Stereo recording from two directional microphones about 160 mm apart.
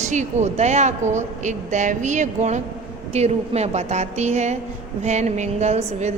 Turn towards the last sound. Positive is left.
turn(degrees=-45)  # may be behind; listen again after turning